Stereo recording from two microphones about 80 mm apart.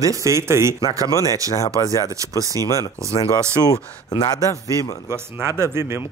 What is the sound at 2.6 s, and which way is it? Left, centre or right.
Speech, left.